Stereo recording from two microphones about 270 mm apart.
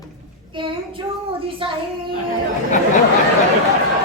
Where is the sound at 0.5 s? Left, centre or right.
Centre.